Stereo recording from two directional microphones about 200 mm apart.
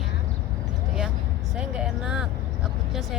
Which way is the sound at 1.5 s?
5° right (ahead or behind).